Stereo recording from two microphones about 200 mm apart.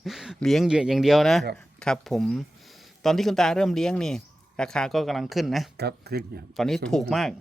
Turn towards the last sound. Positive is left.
turn(degrees=0)  # may be behind; listen again after turning